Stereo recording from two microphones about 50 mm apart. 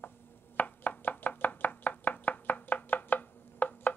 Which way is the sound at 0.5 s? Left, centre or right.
Left.